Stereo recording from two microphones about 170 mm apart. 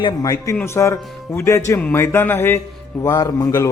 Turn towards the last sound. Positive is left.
turn(degrees=20)  # may be behind; listen again after turning